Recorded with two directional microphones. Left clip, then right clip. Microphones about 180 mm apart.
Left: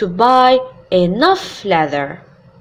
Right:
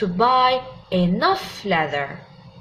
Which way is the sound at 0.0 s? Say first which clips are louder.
Left 6 dB; 50° left (ahead or behind).